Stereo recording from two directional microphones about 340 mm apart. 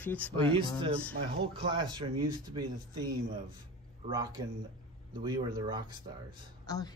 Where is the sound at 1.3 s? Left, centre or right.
Centre.